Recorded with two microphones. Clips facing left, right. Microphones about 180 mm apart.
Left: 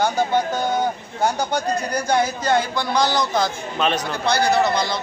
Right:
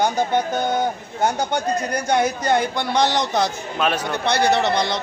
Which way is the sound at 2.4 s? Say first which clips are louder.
Even; 20° right (ahead or behind).